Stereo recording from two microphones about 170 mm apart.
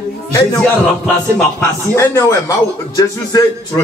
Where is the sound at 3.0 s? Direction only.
20° left (ahead or behind).